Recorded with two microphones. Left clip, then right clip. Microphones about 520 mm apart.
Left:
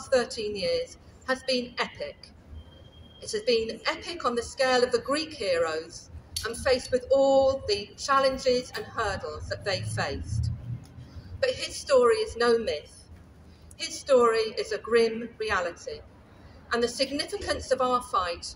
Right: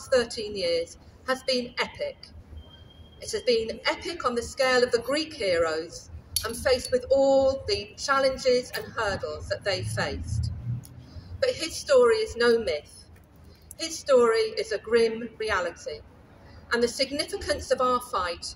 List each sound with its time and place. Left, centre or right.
0.0 s a woman's voice: right